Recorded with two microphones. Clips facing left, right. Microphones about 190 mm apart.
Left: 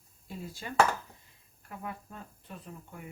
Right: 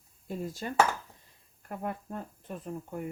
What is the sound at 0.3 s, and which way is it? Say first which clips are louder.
Speech: right 6 dB; 45° right (ahead or behind).